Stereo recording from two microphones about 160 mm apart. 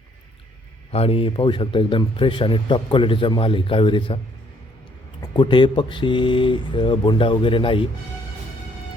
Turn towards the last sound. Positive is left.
turn(degrees=35)  # may be behind; listen again after turning